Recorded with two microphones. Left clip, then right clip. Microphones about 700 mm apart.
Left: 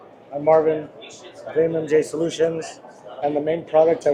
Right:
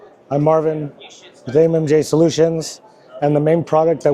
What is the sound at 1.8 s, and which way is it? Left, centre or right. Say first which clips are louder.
A man's voice: right 6 dB; right.